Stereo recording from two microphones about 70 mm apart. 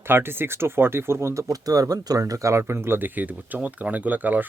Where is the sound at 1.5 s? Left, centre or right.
Right.